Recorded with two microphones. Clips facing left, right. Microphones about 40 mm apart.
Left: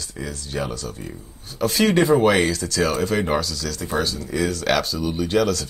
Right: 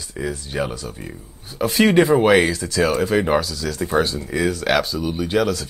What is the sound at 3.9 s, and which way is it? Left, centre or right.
Speech, right.